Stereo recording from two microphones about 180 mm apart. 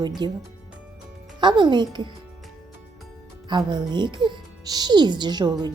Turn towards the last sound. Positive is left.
turn(degrees=-20)  # may be behind; listen again after turning